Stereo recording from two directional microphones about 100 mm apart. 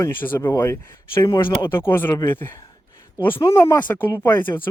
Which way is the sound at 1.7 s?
25° left (ahead or behind).